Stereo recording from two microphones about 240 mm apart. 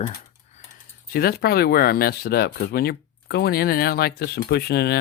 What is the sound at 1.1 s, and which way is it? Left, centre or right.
Speech, left.